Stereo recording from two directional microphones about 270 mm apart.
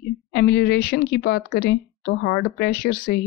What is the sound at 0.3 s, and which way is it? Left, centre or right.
Speech, left.